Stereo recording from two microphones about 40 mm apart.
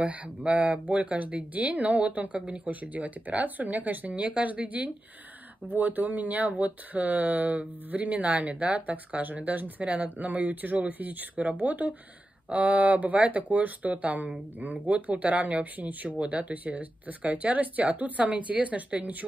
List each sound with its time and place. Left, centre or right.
0.4 s speech: right
5.7 s speech: right
16.2 s speech: right